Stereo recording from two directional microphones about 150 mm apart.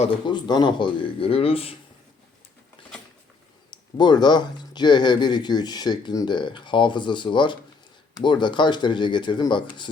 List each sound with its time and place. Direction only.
0.3 s speech: 30° left (ahead or behind)
3.7 s speech: 30° left (ahead or behind)